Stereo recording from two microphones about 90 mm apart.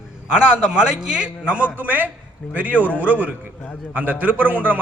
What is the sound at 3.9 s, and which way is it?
Speech, 20° right (ahead or behind).